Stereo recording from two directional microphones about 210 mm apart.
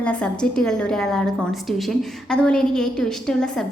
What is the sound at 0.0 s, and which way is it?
A woman's voice, 5° left (ahead or behind).